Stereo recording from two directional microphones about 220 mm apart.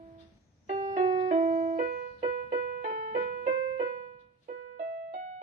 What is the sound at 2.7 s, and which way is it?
Keyboard, 40° right (ahead or behind).